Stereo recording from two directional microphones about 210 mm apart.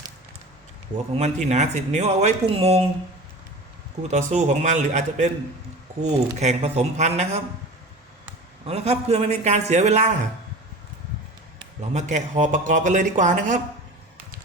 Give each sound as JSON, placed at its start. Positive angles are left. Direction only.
{"t": 1.1, "sound": "speech", "side_deg": -30}
{"t": 4.1, "sound": "speech", "side_deg": -35}
{"t": 8.6, "sound": "speech", "side_deg": -30}
{"t": 11.9, "sound": "speech", "side_deg": -35}